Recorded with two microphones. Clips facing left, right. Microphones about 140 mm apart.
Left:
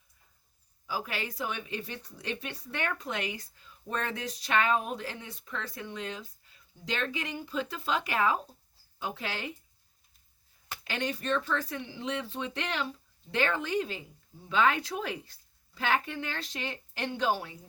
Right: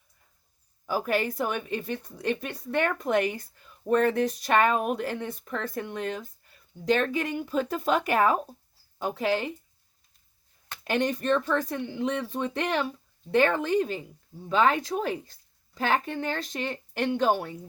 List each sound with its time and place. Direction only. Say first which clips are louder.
0.9 s speech: right 9 dB; 50° right (ahead or behind)
10.8 s speech: right 7 dB; 50° right (ahead or behind)